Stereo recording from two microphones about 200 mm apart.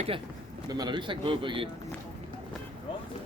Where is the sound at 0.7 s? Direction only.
20° right (ahead or behind).